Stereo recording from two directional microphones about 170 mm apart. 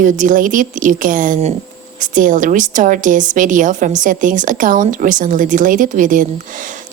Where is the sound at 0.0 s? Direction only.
50° right (ahead or behind).